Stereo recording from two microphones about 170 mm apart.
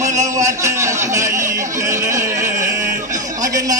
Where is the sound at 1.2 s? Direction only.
50° right (ahead or behind).